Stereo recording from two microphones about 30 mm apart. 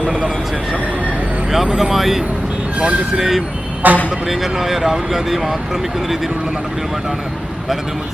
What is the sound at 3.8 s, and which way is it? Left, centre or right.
Speech, right.